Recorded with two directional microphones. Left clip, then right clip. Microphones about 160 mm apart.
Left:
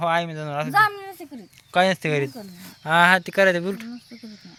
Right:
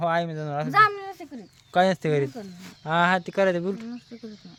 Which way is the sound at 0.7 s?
Centre (ahead or behind).